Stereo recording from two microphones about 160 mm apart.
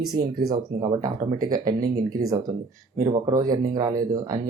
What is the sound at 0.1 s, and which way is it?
A man's voice, 25° right (ahead or behind).